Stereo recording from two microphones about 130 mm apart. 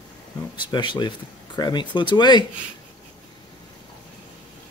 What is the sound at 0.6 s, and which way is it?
Speech, 35° left (ahead or behind).